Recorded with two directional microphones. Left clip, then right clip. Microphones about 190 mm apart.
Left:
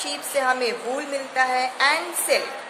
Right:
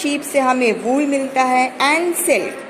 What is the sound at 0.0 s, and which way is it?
A woman's voice, 20° right (ahead or behind).